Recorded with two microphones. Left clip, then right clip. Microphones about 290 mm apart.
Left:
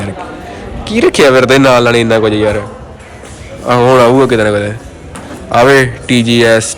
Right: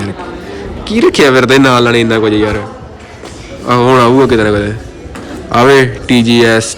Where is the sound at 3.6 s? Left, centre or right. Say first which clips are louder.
Left 1 dB; centre.